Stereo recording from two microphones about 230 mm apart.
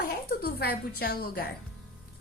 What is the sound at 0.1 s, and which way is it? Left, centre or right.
A child's voice, left.